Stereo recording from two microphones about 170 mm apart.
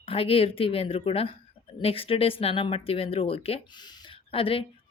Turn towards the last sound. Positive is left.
turn(degrees=30)  # may be behind; listen again after turning